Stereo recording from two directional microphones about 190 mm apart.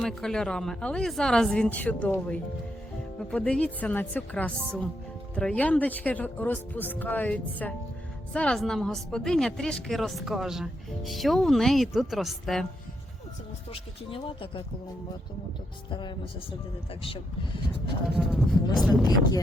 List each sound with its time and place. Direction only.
0.0 s a woman's voice: 5° left (ahead or behind)
14.1 s speech: 30° left (ahead or behind)
15.9 s speech: 25° left (ahead or behind)
18.3 s a woman's voice: centre (ahead or behind)